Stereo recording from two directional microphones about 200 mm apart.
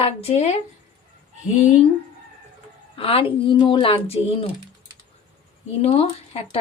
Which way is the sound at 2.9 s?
30° left (ahead or behind).